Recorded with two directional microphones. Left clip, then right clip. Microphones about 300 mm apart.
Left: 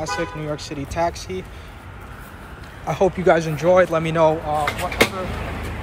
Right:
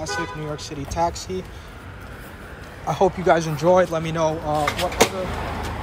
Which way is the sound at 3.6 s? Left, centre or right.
Centre.